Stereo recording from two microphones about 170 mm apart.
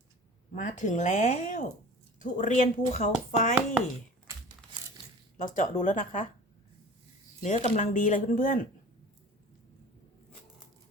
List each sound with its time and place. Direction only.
0.5 s speech: 45° left (ahead or behind)
5.4 s speech: 50° left (ahead or behind)
7.4 s speech: 45° left (ahead or behind)